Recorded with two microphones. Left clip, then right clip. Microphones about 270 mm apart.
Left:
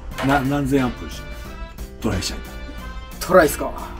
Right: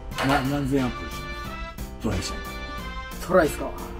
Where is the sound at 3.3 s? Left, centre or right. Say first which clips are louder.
Left 6 dB; left.